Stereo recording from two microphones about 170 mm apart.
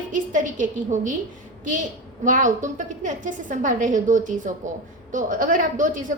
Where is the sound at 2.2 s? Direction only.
50° right (ahead or behind).